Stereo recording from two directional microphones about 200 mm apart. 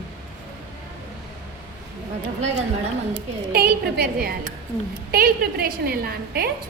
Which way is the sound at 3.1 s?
50° right (ahead or behind).